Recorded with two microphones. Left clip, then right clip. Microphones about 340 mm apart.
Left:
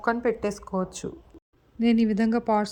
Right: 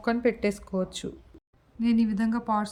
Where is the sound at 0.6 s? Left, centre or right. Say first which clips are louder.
Left 1 dB; left.